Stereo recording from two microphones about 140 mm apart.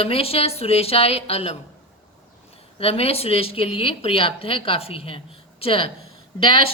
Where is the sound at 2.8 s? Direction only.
45° left (ahead or behind).